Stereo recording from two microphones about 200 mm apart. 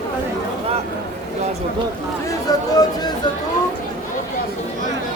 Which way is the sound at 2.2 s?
20° left (ahead or behind).